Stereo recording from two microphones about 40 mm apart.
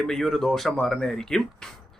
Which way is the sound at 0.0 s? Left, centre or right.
Centre.